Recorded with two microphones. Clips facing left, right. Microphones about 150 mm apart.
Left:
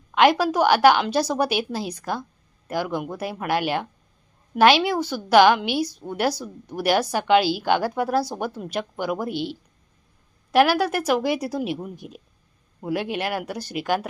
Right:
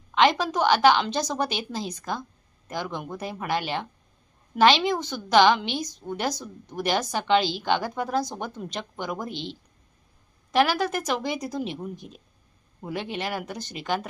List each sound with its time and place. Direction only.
0.1 s a woman's voice: 10° left (ahead or behind)